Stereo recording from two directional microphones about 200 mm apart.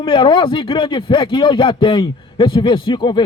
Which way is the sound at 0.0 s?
25° left (ahead or behind).